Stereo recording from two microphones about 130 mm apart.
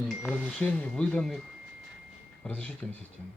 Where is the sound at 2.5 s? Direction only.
10° left (ahead or behind).